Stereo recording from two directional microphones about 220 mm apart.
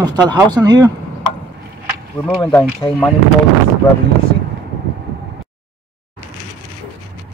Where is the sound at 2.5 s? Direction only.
5° left (ahead or behind).